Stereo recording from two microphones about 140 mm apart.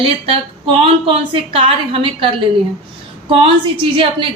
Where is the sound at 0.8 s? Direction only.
40° right (ahead or behind).